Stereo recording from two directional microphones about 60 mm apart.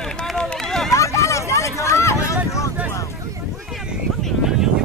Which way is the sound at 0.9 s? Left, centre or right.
Left.